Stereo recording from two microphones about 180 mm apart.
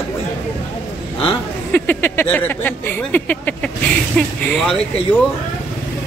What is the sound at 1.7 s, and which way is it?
Speech, 10° left (ahead or behind).